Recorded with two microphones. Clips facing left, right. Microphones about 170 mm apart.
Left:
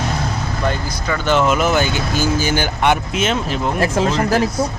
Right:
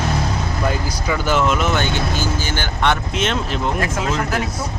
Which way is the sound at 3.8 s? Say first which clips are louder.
Left 4 dB; 30° left (ahead or behind).